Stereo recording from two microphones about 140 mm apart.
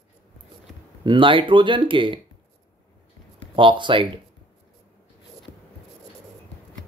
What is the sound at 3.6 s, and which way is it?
Speech, 35° right (ahead or behind).